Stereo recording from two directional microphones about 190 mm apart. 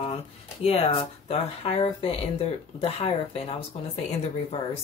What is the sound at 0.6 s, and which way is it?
Speech, 30° left (ahead or behind).